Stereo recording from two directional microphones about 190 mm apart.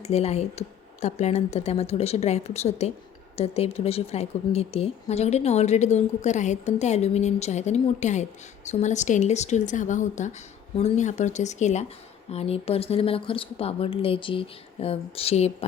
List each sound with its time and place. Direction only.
0.0 s speech: 35° left (ahead or behind)